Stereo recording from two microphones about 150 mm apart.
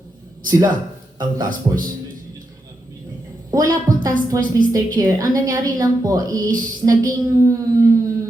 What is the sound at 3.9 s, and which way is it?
Speech, 60° right (ahead or behind).